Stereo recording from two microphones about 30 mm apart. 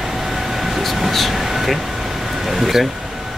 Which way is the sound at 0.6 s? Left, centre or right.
Centre.